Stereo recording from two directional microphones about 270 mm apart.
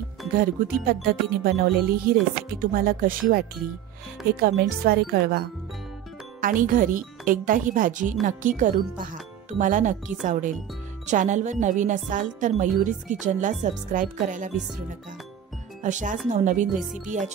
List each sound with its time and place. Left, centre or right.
0.3 s speech: right
6.4 s speech: right